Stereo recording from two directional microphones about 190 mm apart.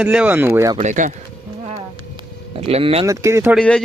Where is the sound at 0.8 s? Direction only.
40° right (ahead or behind).